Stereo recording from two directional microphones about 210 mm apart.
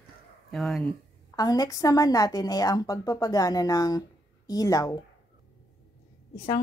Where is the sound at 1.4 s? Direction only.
15° left (ahead or behind).